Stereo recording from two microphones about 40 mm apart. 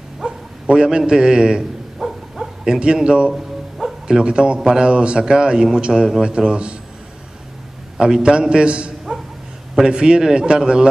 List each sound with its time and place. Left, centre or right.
0.2 s bow-wow: centre
0.7 s a man's voice: right
2.0 s bow-wow: centre
4.1 s a man's voice: right
8.0 s a man's voice: centre